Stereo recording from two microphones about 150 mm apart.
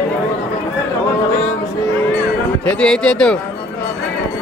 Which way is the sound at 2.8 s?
5° left (ahead or behind).